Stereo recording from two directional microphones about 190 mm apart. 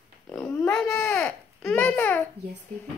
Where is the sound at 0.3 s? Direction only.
10° left (ahead or behind).